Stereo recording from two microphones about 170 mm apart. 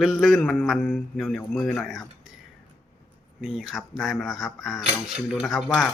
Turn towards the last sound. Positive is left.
turn(degrees=0)  # may be behind; listen again after turning